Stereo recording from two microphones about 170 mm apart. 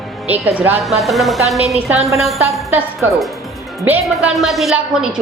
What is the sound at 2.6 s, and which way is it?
Speech, 15° right (ahead or behind).